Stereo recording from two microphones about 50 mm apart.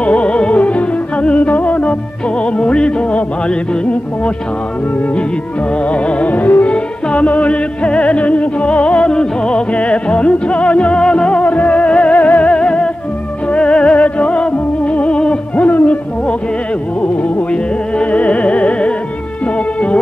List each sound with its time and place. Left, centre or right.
0.0 s music: left
5.9 s music: left